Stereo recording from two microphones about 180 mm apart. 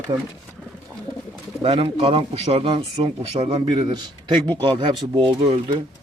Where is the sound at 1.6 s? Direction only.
30° right (ahead or behind).